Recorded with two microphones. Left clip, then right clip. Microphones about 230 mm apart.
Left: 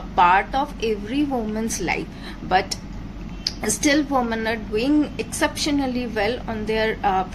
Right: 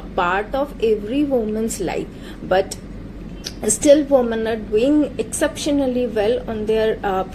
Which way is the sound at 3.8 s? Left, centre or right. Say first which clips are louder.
Right 7 dB; centre.